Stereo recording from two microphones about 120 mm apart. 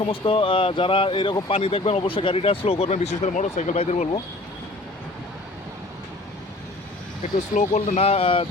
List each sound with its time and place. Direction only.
0.0 s speech: 45° left (ahead or behind)
1.5 s speech: 55° left (ahead or behind); by 4.1 s 75° left (ahead or behind)
7.2 s speech: 90° left; by 8.4 s 50° left (ahead or behind)